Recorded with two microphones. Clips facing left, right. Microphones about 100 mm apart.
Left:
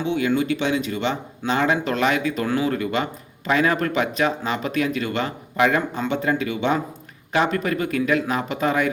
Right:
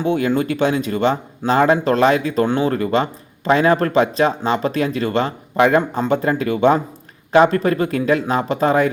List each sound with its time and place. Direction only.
0.0 s speech: 45° right (ahead or behind)